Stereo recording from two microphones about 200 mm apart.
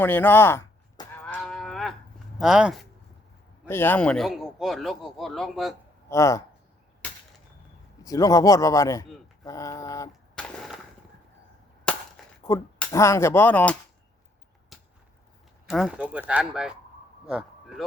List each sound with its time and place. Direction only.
0.0 s cattle: 10° left (ahead or behind)
3.7 s speech: 10° left (ahead or behind)
6.1 s speech: 15° left (ahead or behind)
8.0 s speech: 15° left (ahead or behind)
10.4 s a sound: 5° left (ahead or behind)
11.9 s a sound: 5° left (ahead or behind)
12.9 s speech: 15° left (ahead or behind)
14.7 s a sound: centre (ahead or behind)
15.6 s speech: centre (ahead or behind)